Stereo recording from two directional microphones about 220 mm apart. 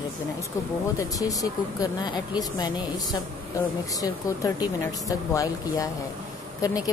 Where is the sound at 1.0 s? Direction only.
15° left (ahead or behind).